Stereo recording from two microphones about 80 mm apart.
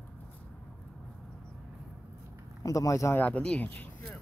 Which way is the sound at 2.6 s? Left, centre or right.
Left.